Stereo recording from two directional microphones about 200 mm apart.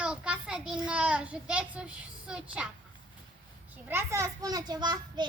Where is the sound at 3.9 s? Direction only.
15° right (ahead or behind).